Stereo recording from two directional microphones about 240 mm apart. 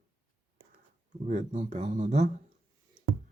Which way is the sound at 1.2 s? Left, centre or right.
Right.